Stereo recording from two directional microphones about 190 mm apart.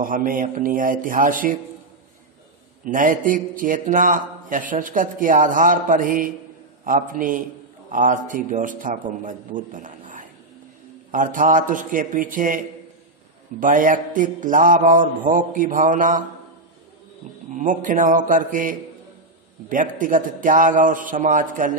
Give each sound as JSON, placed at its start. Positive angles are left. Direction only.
{"t": 0.0, "sound": "speech", "side_deg": -45}
{"t": 2.8, "sound": "speech", "side_deg": -45}
{"t": 17.5, "sound": "speech", "side_deg": -40}